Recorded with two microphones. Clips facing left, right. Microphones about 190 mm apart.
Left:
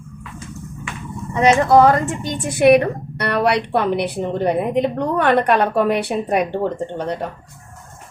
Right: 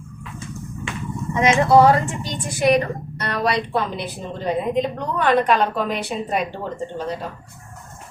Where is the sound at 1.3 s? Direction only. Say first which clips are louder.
Left 2 dB; 40° left (ahead or behind); by 7.3 s 65° left (ahead or behind).